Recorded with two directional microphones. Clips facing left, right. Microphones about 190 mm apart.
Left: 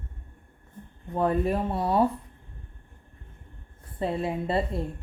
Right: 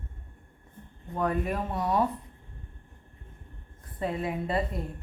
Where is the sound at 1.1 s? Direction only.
30° left (ahead or behind).